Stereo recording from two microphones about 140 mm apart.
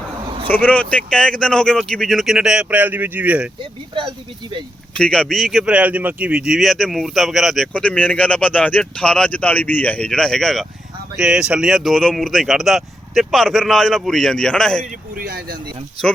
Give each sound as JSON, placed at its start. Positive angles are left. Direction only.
{"t": 0.4, "sound": "speech", "side_deg": 10}
{"t": 4.9, "sound": "speech", "side_deg": 5}
{"t": 15.1, "sound": "speech", "side_deg": -90}